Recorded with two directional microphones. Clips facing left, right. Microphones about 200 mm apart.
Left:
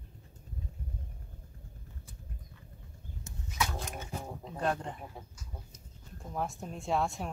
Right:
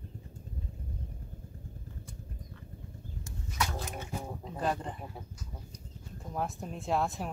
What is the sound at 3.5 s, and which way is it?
Dog, 5° right (ahead or behind).